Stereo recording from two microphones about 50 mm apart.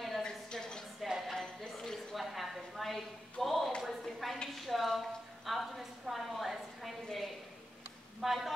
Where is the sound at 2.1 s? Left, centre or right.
Centre.